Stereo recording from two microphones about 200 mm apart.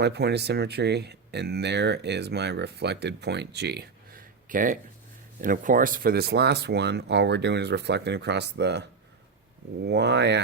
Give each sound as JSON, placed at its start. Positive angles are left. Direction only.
{"t": 0.0, "sound": "speech", "side_deg": -55}